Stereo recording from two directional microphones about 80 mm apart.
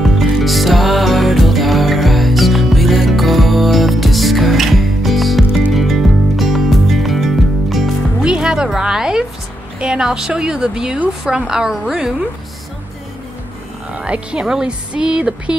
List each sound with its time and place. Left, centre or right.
0.0 s music: centre
8.2 s music: centre
9.8 s a woman's voice: centre
13.9 s speech: centre